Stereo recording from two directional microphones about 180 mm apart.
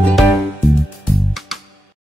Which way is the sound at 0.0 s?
Centre (ahead or behind).